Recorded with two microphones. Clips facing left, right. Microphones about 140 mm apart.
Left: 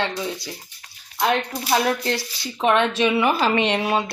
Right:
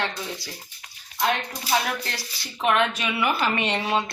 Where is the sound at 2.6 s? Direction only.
25° left (ahead or behind); by 4.1 s 10° left (ahead or behind).